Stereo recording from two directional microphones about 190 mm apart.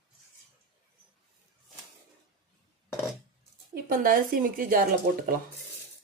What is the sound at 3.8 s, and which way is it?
Speech, 50° right (ahead or behind).